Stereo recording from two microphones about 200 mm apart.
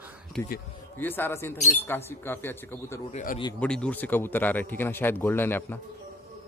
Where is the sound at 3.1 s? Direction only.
35° left (ahead or behind).